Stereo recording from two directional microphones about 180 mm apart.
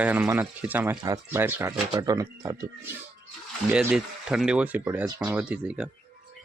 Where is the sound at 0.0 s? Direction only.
10° right (ahead or behind).